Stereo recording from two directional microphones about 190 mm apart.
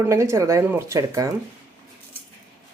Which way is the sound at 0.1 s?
15° right (ahead or behind).